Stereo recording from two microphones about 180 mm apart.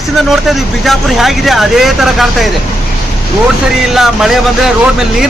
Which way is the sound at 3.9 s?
Centre (ahead or behind).